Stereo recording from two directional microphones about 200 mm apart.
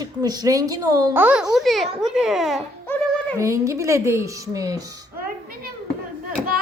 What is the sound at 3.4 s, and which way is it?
A woman's voice, 15° right (ahead or behind).